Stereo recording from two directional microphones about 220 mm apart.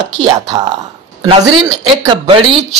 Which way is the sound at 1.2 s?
20° right (ahead or behind).